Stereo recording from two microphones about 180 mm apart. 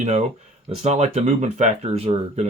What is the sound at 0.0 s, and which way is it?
Speech, 35° right (ahead or behind).